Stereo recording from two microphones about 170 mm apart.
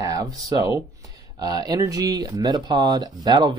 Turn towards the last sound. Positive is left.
turn(degrees=-25)  # may be behind; listen again after turning